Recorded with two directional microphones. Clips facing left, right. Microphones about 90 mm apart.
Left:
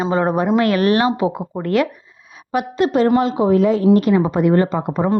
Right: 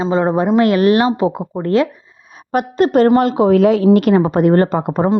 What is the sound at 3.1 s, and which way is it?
Speech, 60° right (ahead or behind).